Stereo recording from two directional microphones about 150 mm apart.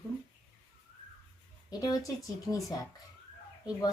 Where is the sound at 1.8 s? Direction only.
25° left (ahead or behind).